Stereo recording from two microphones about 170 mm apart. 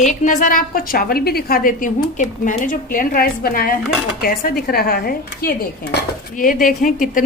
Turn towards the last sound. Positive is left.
turn(degrees=50)  # may be behind; listen again after turning